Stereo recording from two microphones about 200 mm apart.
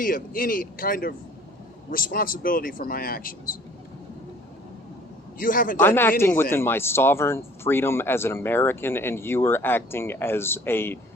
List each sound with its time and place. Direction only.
0.0 s speech: 45° left (ahead or behind)
5.4 s speech: 45° left (ahead or behind)
5.8 s speech: 10° left (ahead or behind)